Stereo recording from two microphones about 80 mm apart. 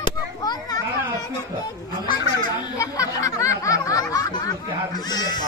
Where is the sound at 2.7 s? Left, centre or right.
Left.